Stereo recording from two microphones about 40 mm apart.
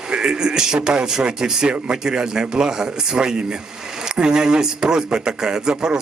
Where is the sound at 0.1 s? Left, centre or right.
Centre.